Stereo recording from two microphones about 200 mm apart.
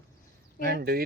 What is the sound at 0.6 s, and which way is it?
Speech, 50° right (ahead or behind).